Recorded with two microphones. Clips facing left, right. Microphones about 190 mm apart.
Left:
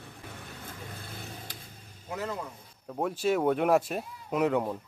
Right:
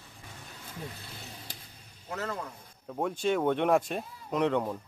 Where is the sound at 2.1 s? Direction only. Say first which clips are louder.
Left 1 dB; 15° left (ahead or behind).